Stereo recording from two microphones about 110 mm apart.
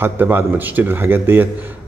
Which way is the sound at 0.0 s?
20° right (ahead or behind).